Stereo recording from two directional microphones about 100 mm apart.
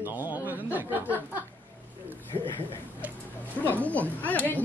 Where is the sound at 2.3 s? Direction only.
25° left (ahead or behind).